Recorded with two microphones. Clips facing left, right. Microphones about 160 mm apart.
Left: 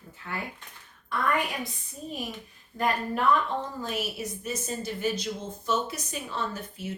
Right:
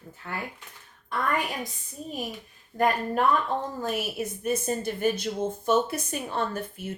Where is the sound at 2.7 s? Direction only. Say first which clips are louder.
Right 5 dB; 35° right (ahead or behind).